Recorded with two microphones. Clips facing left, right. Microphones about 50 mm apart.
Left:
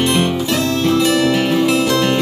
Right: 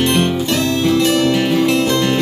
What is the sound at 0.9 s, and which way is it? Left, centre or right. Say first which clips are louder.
Music: even; centre.